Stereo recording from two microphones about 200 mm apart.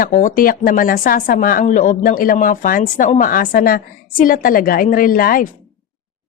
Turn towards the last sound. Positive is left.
turn(degrees=45)  # may be behind; listen again after turning